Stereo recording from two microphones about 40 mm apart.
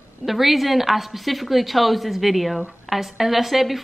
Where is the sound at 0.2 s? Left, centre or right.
Centre.